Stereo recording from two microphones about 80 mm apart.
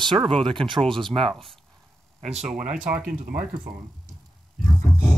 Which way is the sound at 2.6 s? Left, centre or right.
Centre.